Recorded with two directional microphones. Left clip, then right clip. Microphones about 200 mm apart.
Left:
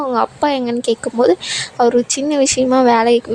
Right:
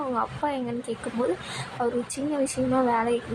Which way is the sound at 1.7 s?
45° left (ahead or behind).